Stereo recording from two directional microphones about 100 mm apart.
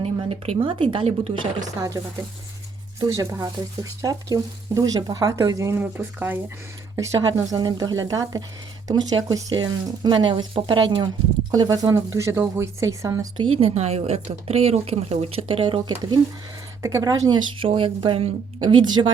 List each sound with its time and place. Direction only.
0.0 s speech: 80° right
3.0 s speech: 40° right (ahead or behind)
5.8 s speech: 15° right (ahead or behind)
6.9 s speech: 30° right (ahead or behind); by 11.1 s 55° right (ahead or behind)
11.5 s speech: 40° right (ahead or behind)
13.5 s speech: 80° right; by 16.1 s 60° right (ahead or behind)
16.8 s speech: 35° right (ahead or behind)
17.6 s speech: 60° right (ahead or behind)